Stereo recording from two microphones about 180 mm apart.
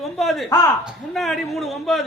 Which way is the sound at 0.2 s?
Centre (ahead or behind).